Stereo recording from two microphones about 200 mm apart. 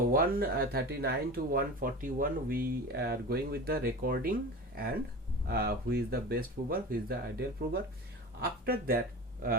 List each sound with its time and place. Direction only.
0.1 s speech: 45° right (ahead or behind)
5.5 s speech: 50° right (ahead or behind)